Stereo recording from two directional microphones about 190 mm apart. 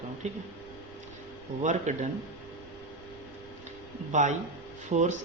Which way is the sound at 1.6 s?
40° right (ahead or behind).